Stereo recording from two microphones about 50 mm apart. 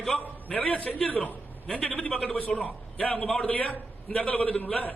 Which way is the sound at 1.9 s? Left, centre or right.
Left.